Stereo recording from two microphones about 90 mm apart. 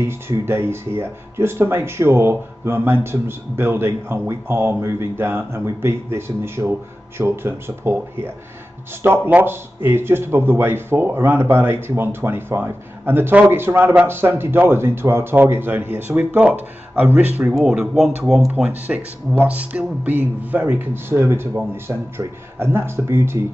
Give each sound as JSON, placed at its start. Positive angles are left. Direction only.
{"t": 0.3, "sound": "speech", "side_deg": -25}
{"t": 17.6, "sound": "speech", "side_deg": -5}